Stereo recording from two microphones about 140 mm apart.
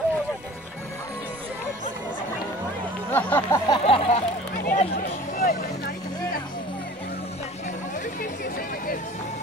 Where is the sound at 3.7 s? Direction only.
40° left (ahead or behind).